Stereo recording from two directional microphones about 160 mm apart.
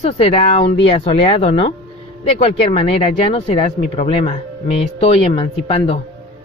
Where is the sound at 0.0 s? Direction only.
40° left (ahead or behind).